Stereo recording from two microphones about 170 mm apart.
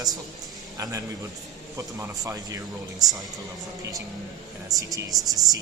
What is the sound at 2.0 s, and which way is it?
Speech, 20° right (ahead or behind).